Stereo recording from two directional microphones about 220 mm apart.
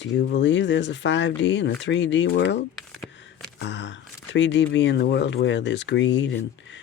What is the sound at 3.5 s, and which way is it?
Speech, 55° left (ahead or behind).